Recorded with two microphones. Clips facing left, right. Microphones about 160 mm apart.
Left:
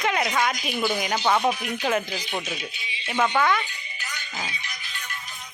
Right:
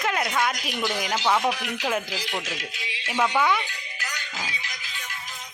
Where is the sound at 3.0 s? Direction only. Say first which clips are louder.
Left 1 dB; centre (ahead or behind).